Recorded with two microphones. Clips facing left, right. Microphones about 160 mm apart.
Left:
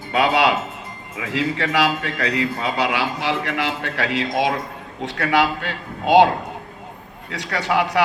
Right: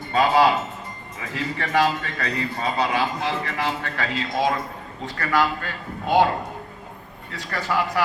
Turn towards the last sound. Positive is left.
turn(degrees=75)  # may be behind; listen again after turning